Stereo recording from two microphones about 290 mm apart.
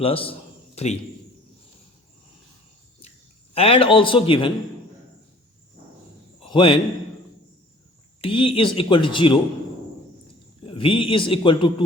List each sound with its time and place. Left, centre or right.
0.0 s a man's voice: centre
3.5 s speech: centre
6.5 s a man's voice: centre
8.2 s speech: centre
10.7 s speech: centre